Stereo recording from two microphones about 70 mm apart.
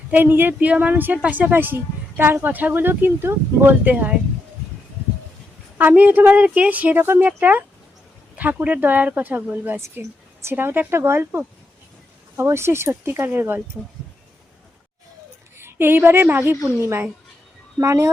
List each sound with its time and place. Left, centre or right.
0.1 s speech: right
5.7 s speech: right
12.4 s speech: right
15.5 s a woman's voice: right